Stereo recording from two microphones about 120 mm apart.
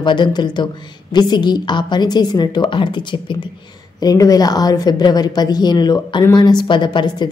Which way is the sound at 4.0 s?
30° left (ahead or behind).